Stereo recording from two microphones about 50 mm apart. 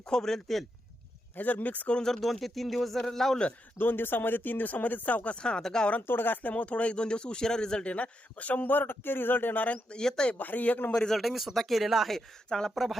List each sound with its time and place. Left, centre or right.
0.0 s a man's voice: centre
1.4 s speech: left
1.9 s speech: centre
3.8 s a man's voice: left; by 5.9 s centre
6.0 s speech: left
6.5 s speech: left
9.9 s a man's voice: centre
10.3 s speech: left
10.9 s a man's voice: centre
11.2 s speech: centre
12.5 s a man's voice: centre
12.7 s speech: centre